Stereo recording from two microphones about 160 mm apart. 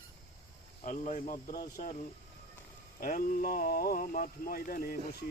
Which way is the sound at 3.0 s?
65° left (ahead or behind).